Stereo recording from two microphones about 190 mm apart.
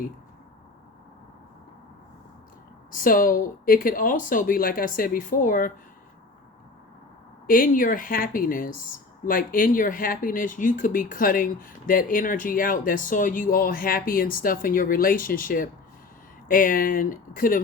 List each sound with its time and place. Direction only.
2.9 s speech: 45° left (ahead or behind)
7.4 s speech: 45° left (ahead or behind)